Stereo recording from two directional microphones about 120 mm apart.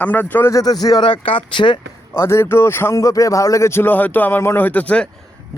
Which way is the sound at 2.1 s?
20° left (ahead or behind).